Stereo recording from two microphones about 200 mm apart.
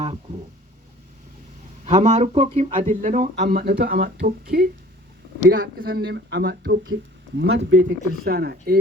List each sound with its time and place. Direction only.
1.8 s speech: 40° right (ahead or behind); by 7.8 s 60° right (ahead or behind)
7.9 s speech: 50° right (ahead or behind)